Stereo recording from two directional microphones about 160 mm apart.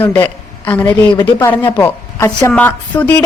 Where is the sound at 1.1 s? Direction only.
25° left (ahead or behind).